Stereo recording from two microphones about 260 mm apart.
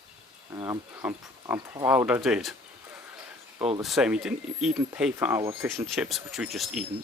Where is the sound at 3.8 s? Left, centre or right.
Centre.